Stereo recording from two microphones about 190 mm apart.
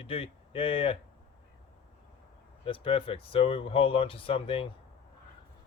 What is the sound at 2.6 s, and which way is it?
Speech, 30° left (ahead or behind).